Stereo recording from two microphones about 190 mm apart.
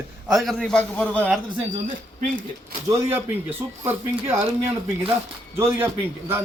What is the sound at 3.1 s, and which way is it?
A man's voice, 10° right (ahead or behind).